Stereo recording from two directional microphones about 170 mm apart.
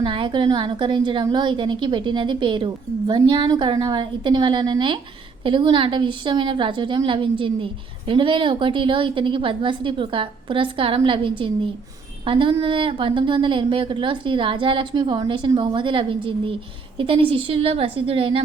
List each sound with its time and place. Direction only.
0.0 s a woman's voice: 30° right (ahead or behind)